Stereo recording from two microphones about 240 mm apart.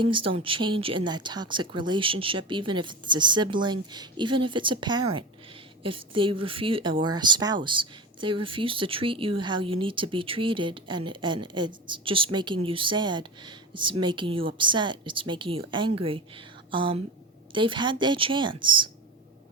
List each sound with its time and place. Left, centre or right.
0.0 s speech: right